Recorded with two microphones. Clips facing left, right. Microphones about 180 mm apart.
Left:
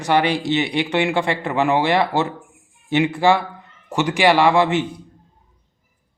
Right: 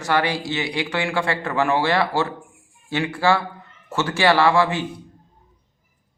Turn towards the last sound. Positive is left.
turn(degrees=20)  # may be behind; listen again after turning